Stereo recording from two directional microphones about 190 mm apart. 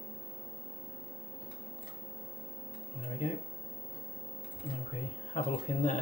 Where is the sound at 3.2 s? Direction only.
40° left (ahead or behind).